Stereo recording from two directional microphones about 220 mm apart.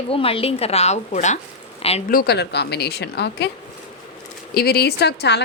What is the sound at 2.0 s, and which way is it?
A woman's voice, 45° left (ahead or behind).